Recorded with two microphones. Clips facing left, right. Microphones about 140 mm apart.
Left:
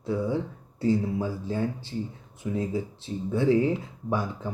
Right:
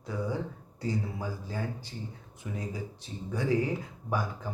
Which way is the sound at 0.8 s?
20° left (ahead or behind).